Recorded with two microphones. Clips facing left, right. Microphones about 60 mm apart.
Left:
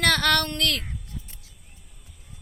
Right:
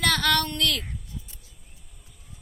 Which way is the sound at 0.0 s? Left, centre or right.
Left.